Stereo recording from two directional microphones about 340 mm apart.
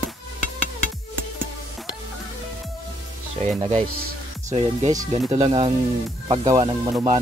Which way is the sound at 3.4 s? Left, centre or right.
Centre.